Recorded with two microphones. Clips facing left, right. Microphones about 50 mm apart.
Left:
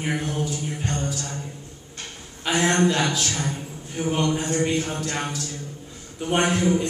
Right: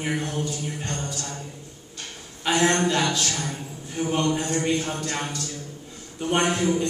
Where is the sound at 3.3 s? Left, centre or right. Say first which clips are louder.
Left 2 dB; left.